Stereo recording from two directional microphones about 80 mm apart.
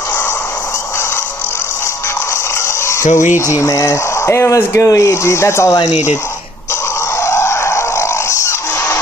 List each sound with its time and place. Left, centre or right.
2.9 s fowl: left
3.6 s speech: left
7.2 s a sound: left